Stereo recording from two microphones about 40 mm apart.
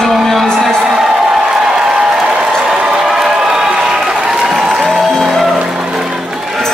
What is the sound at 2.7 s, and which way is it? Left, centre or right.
Applause, centre.